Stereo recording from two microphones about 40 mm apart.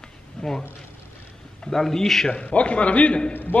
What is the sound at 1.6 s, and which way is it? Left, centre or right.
Speech, centre.